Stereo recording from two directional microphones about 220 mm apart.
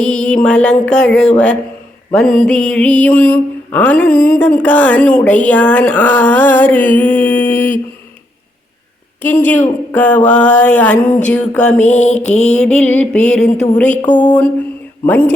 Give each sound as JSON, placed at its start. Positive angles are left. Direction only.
{"t": 0.0, "sound": "music", "side_deg": 5}
{"t": 2.1, "sound": "mantra", "side_deg": 0}
{"t": 9.2, "sound": "mantra", "side_deg": 10}
{"t": 10.2, "sound": "music", "side_deg": 5}
{"t": 11.9, "sound": "music", "side_deg": 30}
{"t": 12.5, "sound": "music", "side_deg": 5}
{"t": 13.9, "sound": "music", "side_deg": 35}
{"t": 14.2, "sound": "mantra", "side_deg": 5}